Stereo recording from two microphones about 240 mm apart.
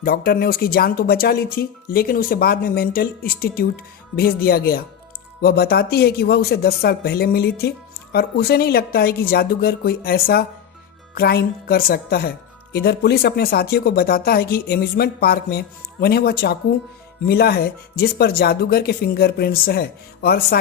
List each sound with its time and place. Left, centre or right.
0.0 s speech: left